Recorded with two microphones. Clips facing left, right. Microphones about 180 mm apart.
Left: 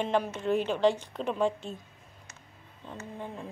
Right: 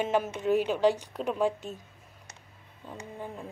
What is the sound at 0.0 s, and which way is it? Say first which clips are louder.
A woman's voice: right 1 dB; 10° right (ahead or behind).